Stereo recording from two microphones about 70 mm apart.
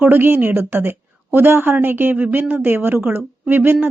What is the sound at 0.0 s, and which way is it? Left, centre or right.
A woman's voice, right.